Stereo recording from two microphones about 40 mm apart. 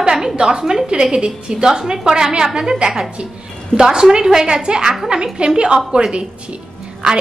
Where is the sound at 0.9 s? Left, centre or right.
Right.